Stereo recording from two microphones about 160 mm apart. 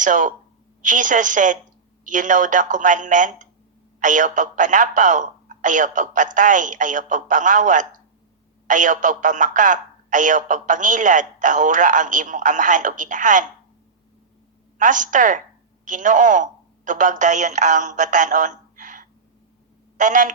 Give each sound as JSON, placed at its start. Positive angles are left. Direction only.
{"t": 0.0, "sound": "speech", "side_deg": -55}
{"t": 14.8, "sound": "speech", "side_deg": -55}